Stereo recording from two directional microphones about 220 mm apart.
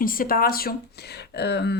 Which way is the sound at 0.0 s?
40° left (ahead or behind).